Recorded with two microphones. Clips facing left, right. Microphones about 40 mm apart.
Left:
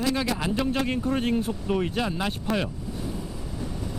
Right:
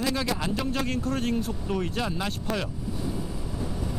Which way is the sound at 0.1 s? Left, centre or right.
Centre.